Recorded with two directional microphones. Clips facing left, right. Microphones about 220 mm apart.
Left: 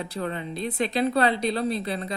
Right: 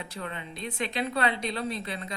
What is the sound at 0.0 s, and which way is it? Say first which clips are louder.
A woman's voice: left 7 dB; 35° left (ahead or behind).